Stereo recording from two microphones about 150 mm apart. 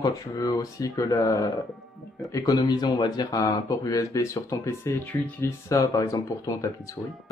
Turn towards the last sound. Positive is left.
turn(degrees=20)  # may be behind; listen again after turning